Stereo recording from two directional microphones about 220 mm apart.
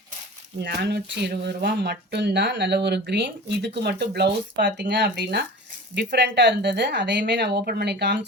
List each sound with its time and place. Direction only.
0.6 s speech: 45° right (ahead or behind)